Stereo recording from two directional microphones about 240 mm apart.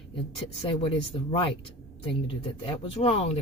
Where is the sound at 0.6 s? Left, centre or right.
Left.